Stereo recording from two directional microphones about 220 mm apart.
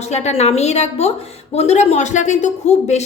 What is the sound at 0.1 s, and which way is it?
A woman's voice, 30° left (ahead or behind).